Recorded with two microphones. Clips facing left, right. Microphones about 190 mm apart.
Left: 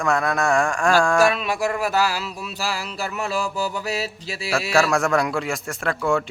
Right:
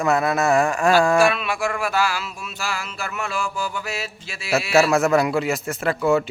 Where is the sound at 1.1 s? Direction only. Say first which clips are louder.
Even; 40° left (ahead or behind).